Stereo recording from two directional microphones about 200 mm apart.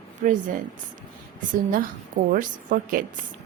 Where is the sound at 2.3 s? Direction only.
40° right (ahead or behind).